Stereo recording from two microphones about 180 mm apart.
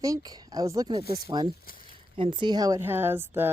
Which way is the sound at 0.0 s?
20° right (ahead or behind).